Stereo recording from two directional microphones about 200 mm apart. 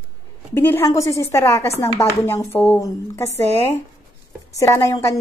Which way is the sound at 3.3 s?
35° right (ahead or behind).